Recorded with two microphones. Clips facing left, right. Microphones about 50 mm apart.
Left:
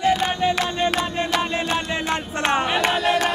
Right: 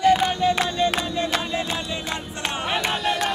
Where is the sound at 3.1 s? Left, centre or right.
Left.